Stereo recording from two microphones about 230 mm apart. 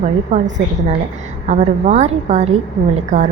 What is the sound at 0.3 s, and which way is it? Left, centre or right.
A woman's voice, right.